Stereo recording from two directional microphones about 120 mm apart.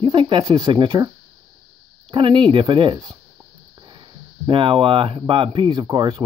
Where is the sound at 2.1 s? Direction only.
45° right (ahead or behind).